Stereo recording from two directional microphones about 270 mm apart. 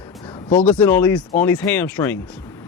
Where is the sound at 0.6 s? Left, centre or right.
Centre.